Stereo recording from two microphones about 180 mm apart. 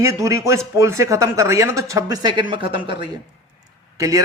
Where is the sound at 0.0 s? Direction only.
15° right (ahead or behind).